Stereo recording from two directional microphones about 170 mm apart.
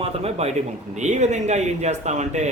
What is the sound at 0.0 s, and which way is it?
A man's voice, 40° right (ahead or behind).